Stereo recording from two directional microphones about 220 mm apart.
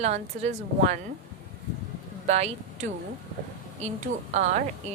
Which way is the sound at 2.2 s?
30° right (ahead or behind).